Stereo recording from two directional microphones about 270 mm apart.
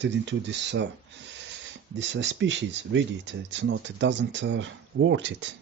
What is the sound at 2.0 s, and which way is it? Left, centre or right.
Speech, right.